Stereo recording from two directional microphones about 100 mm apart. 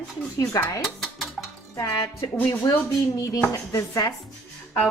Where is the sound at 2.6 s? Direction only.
55° left (ahead or behind).